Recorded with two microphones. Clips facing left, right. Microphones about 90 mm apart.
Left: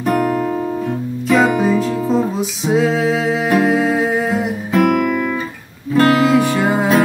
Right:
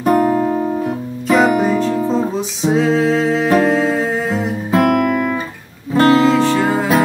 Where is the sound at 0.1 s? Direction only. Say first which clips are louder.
Right 3 dB; 30° right (ahead or behind).